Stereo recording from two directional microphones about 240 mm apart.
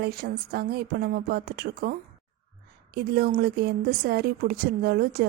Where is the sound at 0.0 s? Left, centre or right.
Right.